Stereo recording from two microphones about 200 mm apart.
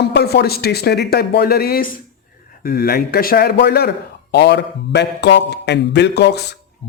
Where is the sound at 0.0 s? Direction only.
55° left (ahead or behind).